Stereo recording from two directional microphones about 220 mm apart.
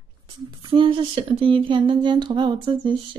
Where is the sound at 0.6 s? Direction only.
20° right (ahead or behind).